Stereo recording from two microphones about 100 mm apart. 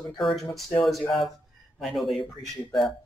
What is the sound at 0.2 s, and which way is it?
Speech, centre (ahead or behind).